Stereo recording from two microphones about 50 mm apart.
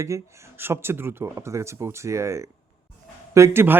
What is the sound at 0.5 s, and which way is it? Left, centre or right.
Speech, right.